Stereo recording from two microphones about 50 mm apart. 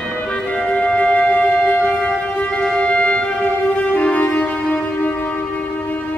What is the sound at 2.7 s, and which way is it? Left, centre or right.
Music, left.